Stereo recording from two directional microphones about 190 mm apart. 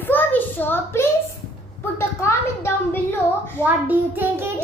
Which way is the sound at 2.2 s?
15° left (ahead or behind).